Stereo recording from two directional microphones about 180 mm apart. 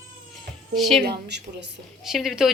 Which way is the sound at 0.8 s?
Centre (ahead or behind).